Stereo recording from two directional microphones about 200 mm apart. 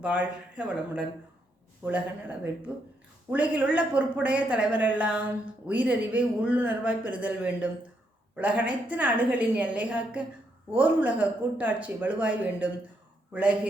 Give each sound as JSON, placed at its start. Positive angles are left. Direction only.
{"t": 0.0, "sound": "speech", "side_deg": -5}